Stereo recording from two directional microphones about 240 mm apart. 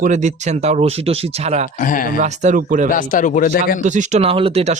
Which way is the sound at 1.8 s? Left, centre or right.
Left.